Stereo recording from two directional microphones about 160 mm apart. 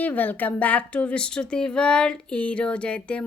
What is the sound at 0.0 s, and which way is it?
A woman's voice, 10° left (ahead or behind).